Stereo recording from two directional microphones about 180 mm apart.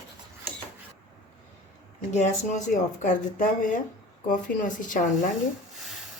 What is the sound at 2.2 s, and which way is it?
Speech, 40° left (ahead or behind).